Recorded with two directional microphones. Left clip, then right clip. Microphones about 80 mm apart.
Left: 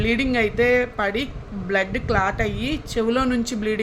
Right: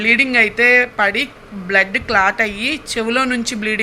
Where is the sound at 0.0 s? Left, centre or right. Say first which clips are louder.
Right 8 dB; left.